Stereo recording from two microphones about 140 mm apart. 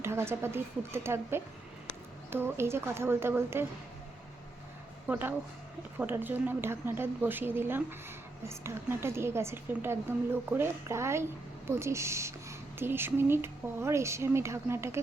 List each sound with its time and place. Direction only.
0.0 s a woman's voice: 20° right (ahead or behind)
5.0 s a woman's voice: 10° right (ahead or behind)